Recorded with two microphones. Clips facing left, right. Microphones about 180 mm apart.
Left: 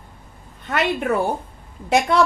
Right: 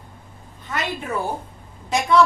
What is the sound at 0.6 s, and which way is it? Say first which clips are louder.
Speech: left 6 dB; 65° left (ahead or behind).